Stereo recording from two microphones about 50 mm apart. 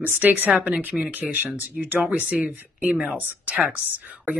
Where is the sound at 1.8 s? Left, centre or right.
Centre.